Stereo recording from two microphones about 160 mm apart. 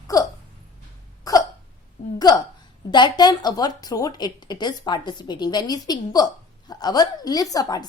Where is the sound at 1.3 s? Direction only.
25° left (ahead or behind).